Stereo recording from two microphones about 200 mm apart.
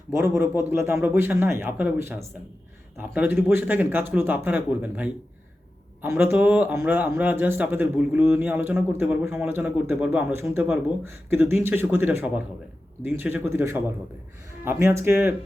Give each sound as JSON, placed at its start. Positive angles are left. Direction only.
{"t": 0.1, "sound": "speech", "side_deg": -15}